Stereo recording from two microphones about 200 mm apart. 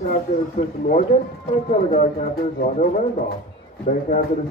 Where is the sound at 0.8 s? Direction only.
45° left (ahead or behind).